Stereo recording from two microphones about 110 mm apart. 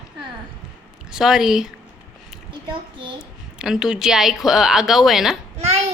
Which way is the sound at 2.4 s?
45° right (ahead or behind).